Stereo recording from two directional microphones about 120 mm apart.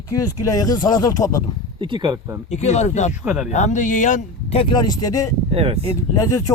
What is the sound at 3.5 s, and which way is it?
Speech, 80° left.